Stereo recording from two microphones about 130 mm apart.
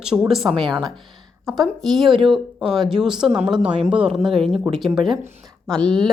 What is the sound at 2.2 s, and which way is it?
Speech, 5° right (ahead or behind).